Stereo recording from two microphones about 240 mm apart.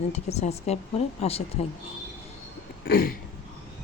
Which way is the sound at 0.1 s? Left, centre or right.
Left.